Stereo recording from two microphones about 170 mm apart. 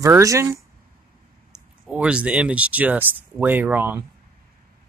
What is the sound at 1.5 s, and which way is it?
Speech, 5° right (ahead or behind).